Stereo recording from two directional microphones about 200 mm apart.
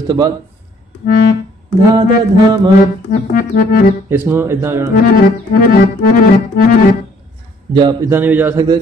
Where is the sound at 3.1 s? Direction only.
45° left (ahead or behind).